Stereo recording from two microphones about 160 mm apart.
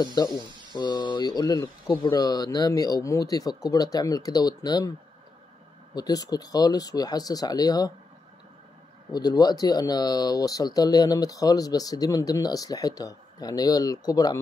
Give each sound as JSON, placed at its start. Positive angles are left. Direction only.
{"t": 0.0, "sound": "speech", "side_deg": 25}
{"t": 0.4, "sound": "a sound", "side_deg": -30}
{"t": 0.7, "sound": "speech", "side_deg": 30}
{"t": 5.9, "sound": "speech", "side_deg": 25}
{"t": 9.1, "sound": "speech", "side_deg": 25}